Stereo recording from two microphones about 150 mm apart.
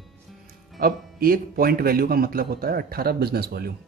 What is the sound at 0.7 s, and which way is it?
Speech, 80° right.